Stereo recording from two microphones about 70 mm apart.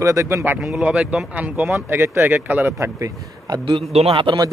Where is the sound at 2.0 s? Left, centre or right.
Right.